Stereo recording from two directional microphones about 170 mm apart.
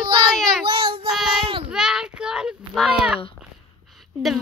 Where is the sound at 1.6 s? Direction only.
5° right (ahead or behind).